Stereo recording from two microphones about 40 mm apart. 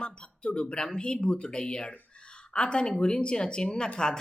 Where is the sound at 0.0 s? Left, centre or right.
Left.